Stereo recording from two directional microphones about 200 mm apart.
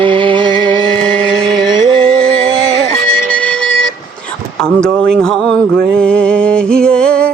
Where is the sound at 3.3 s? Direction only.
5° left (ahead or behind).